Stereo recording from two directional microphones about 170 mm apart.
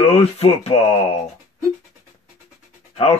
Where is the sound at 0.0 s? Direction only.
35° left (ahead or behind).